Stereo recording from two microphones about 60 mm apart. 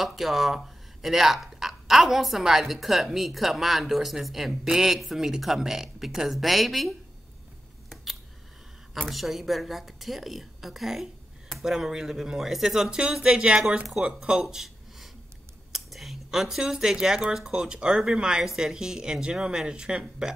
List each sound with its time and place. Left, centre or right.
0.0 s a woman's voice: centre
9.1 s a woman's voice: centre
14.4 s a sound: centre
15.7 s speech: centre